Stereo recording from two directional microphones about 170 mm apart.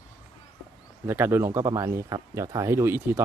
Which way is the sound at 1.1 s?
15° right (ahead or behind).